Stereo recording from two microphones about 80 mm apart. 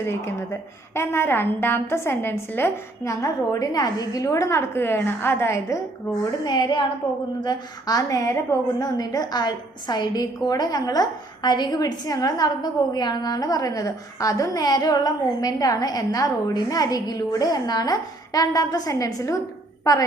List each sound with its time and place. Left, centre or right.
0.0 s a woman's voice: left
3.1 s a woman's voice: left
3.7 s a woman's voice: left
6.4 s a woman's voice: left
7.4 s a woman's voice: left